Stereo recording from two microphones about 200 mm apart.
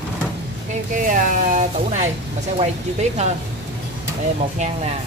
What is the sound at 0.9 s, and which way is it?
Speech, 40° right (ahead or behind).